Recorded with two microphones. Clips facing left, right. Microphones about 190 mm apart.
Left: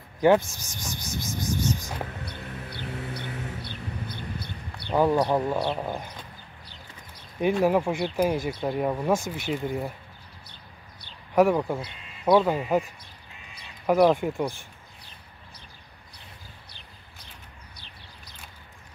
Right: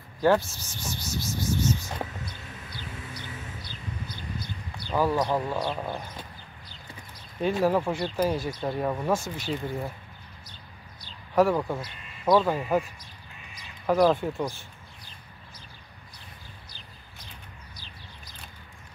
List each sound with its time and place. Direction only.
0.2 s speech: 15° left (ahead or behind)
2.2 s a sound: 60° left (ahead or behind)
4.9 s speech: 20° left (ahead or behind)
7.3 s speech: 15° left (ahead or behind)
11.3 s speech: 15° left (ahead or behind)
11.8 s speech: 25° left (ahead or behind)
12.4 s speech: 15° left (ahead or behind)
13.8 s speech: 10° left (ahead or behind)